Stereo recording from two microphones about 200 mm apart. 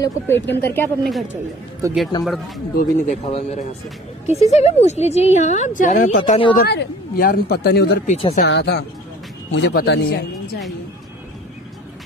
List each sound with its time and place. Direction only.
0.0 s speech: 10° left (ahead or behind)
1.8 s speech: 15° right (ahead or behind)
2.7 s speech: 45° left (ahead or behind)
3.3 s speech: 30° left (ahead or behind)
6.6 s speech: 55° left (ahead or behind)
8.1 s speech: 30° left (ahead or behind)
8.5 s speech: 55° left (ahead or behind)